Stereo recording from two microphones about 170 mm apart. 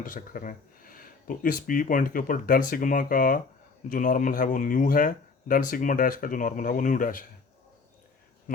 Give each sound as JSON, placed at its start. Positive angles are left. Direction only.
{"t": 0.0, "sound": "speech", "side_deg": 55}